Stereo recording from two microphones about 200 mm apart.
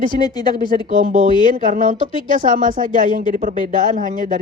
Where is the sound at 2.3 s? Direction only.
40° right (ahead or behind).